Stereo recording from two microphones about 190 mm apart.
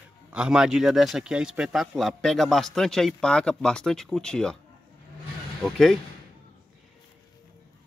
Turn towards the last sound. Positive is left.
turn(degrees=0)  # may be behind; listen again after turning